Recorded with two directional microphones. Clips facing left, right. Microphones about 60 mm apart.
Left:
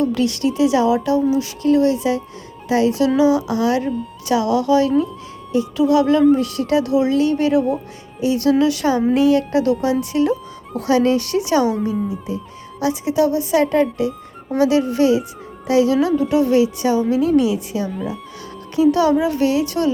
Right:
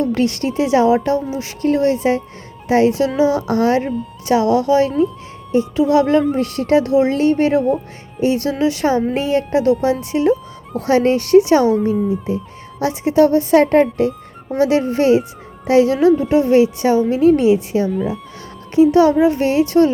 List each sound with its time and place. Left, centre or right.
0.0 s speech: right
14.5 s speech: right
17.9 s speech: centre
18.8 s speech: right